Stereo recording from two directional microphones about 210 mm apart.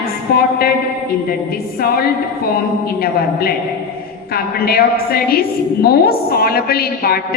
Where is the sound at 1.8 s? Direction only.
45° left (ahead or behind).